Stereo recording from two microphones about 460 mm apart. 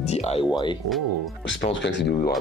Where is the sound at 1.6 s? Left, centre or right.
Left.